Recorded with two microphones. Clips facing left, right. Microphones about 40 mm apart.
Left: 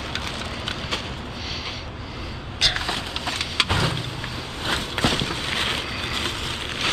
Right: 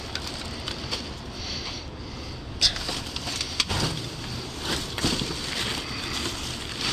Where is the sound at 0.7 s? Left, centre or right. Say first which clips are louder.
Left 5 dB; left.